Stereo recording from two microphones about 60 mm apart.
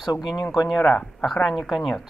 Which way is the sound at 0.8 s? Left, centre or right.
Centre.